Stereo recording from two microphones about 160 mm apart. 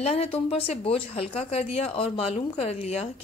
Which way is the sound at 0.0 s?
40° left (ahead or behind).